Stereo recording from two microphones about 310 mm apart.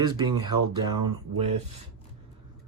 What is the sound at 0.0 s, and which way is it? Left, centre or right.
Speech, centre.